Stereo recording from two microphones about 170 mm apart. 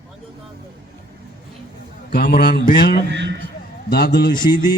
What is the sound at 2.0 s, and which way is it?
Mantra, 70° left (ahead or behind).